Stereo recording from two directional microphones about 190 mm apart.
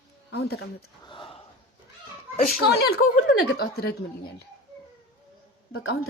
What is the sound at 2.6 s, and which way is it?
Speech, 55° left (ahead or behind).